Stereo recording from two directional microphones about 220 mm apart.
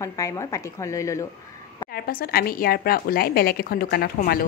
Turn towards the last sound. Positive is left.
turn(degrees=45)  # may be behind; listen again after turning